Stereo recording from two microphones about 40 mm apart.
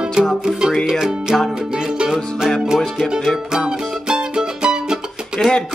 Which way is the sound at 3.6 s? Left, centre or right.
Centre.